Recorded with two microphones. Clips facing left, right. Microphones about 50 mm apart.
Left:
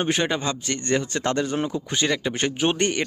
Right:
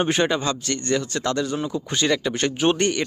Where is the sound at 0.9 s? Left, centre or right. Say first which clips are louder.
Even; left.